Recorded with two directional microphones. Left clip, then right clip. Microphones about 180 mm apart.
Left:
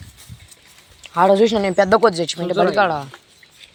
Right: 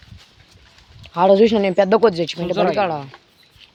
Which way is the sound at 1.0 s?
20° right (ahead or behind).